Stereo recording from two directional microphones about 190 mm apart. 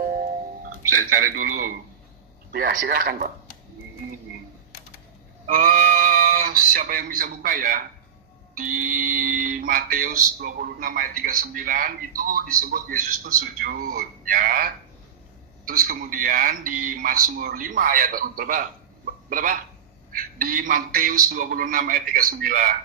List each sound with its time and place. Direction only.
0.8 s speech: 45° right (ahead or behind)
5.5 s speech: 45° right (ahead or behind)